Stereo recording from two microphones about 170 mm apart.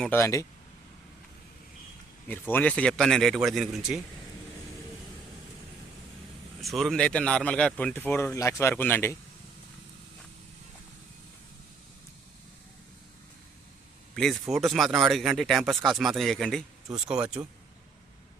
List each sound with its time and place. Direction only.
0.0 s speech: 15° left (ahead or behind)
2.5 s speech: 10° left (ahead or behind)
6.6 s speech: centre (ahead or behind)
14.2 s speech: centre (ahead or behind)